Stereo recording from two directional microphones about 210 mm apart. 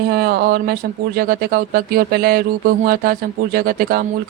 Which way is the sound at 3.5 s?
45° right (ahead or behind).